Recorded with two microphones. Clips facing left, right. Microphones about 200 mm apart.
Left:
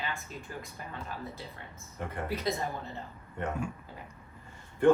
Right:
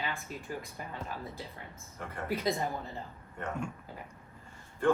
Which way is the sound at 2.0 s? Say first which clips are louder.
Left 4 dB; 20° left (ahead or behind).